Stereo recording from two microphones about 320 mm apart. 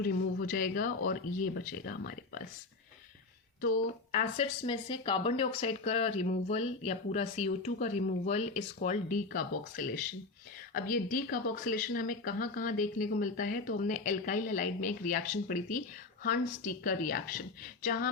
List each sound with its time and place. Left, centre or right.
0.0 s speech: left
3.6 s speech: left